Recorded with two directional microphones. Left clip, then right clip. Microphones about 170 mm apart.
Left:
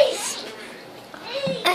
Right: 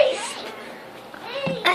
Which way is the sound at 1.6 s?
15° left (ahead or behind).